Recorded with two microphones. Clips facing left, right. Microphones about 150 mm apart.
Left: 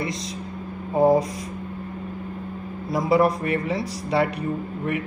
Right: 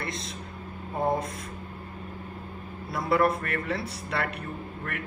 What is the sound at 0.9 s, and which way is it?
Speech, 90° left.